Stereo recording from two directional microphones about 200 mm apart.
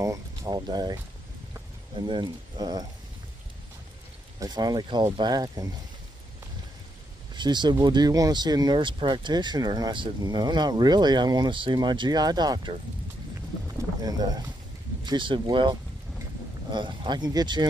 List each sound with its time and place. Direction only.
0.0 s speech: 20° right (ahead or behind)
4.4 s speech: 20° right (ahead or behind)
7.3 s speech: 20° right (ahead or behind)
14.0 s speech: 20° right (ahead or behind)